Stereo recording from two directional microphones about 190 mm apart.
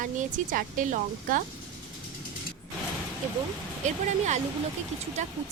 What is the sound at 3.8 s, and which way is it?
Speech, 40° right (ahead or behind).